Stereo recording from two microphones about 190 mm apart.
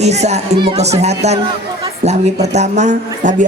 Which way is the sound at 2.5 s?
35° right (ahead or behind).